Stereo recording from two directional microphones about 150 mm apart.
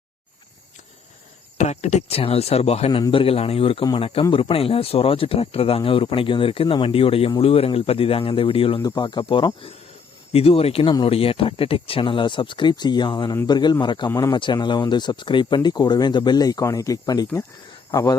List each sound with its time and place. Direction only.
1.5 s speech: 50° left (ahead or behind); by 13.3 s 30° left (ahead or behind)
13.3 s speech: 20° left (ahead or behind)
13.6 s speech: 30° left (ahead or behind)
14.1 s speech: 20° left (ahead or behind)
14.3 s speech: 30° left (ahead or behind)